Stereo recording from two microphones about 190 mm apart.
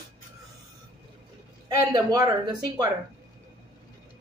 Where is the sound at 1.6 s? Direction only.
20° right (ahead or behind).